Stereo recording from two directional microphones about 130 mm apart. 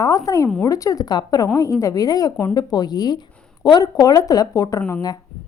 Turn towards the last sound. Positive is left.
turn(degrees=30)  # may be behind; listen again after turning